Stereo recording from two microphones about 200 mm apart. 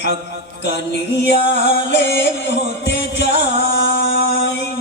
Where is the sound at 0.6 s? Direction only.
60° left (ahead or behind).